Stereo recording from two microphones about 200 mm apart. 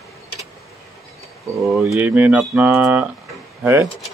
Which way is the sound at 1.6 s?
5° right (ahead or behind).